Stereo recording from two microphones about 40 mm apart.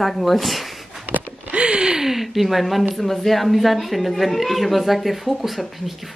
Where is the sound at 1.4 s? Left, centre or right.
Right.